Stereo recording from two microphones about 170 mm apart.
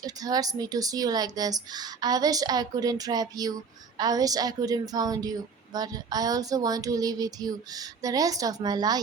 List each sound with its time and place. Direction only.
0.0 s a woman's voice: 20° right (ahead or behind)